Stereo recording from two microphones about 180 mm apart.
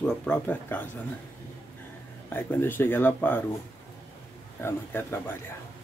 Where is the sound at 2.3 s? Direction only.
10° left (ahead or behind).